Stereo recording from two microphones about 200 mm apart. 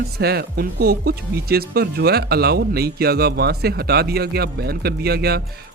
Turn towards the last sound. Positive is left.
turn(degrees=-50)  # may be behind; listen again after turning